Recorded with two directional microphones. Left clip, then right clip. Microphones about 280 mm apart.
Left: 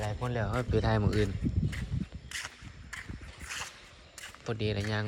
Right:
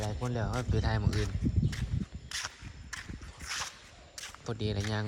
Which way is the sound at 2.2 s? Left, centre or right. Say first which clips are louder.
Right 2 dB; centre.